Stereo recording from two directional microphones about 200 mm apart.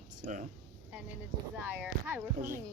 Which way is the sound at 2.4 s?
45° right (ahead or behind).